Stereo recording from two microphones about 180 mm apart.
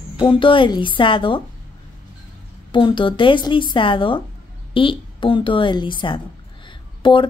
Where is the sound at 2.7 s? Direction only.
30° left (ahead or behind).